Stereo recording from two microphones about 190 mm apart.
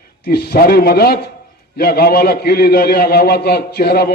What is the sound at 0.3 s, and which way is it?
A man's voice, 55° left (ahead or behind).